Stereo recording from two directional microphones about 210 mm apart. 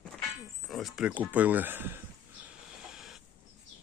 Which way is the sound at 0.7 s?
Centre (ahead or behind).